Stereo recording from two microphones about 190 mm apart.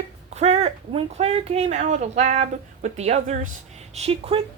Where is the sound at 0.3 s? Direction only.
35° right (ahead or behind).